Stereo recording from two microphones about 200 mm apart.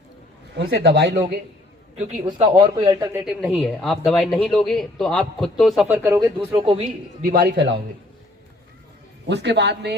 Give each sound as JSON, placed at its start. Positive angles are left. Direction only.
{"t": 0.5, "sound": "speech", "side_deg": -55}
{"t": 2.2, "sound": "a man's voice", "side_deg": -25}
{"t": 3.2, "sound": "a man's voice", "side_deg": 0}
{"t": 6.0, "sound": "speech", "side_deg": -15}
{"t": 7.2, "sound": "a man's voice", "side_deg": -45}
{"t": 9.2, "sound": "speech", "side_deg": -60}